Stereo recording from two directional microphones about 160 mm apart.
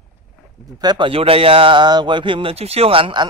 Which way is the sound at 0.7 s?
30° right (ahead or behind).